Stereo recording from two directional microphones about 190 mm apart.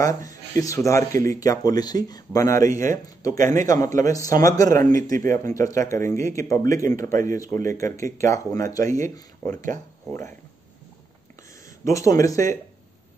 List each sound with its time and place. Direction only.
0.0 s speech: 15° left (ahead or behind)
3.3 s speech: 45° right (ahead or behind)
4.0 s speech: 15° left (ahead or behind)
4.6 s speech: 45° right (ahead or behind)
5.5 s speech: 15° left (ahead or behind)
7.0 s speech: 45° right (ahead or behind)
7.5 s speech: 15° left (ahead or behind)
9.5 s speech: 40° right (ahead or behind)
11.8 s speech: 15° left (ahead or behind)